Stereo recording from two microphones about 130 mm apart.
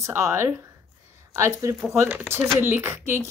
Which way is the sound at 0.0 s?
20° right (ahead or behind).